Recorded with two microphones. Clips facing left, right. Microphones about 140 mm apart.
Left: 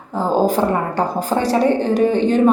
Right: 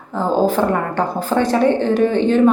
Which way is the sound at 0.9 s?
40° left (ahead or behind).